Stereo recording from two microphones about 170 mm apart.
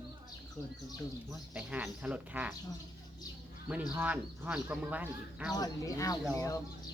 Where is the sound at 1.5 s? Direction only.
5° right (ahead or behind).